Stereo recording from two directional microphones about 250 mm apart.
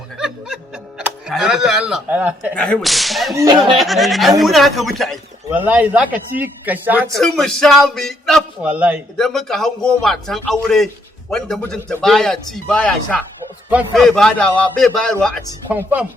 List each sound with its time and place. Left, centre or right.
0.2 s snicker: centre
2.6 s speech: centre
3.3 s speech: centre
3.8 s speech: centre